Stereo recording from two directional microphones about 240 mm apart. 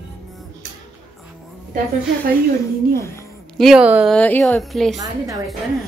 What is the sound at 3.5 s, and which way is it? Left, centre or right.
A woman's voice, centre.